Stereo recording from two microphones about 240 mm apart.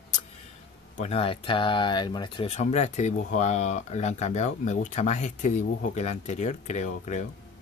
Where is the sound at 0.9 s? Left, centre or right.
Left.